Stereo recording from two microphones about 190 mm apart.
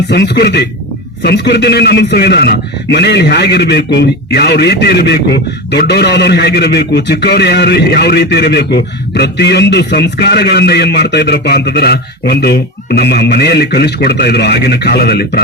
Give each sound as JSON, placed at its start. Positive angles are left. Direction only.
{"t": 0.1, "sound": "a man's voice", "side_deg": 60}